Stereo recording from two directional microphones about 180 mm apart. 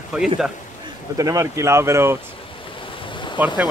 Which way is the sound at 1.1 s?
20° right (ahead or behind).